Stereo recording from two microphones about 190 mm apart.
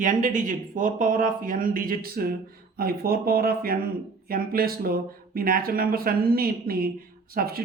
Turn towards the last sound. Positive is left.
turn(degrees=-50)  # may be behind; listen again after turning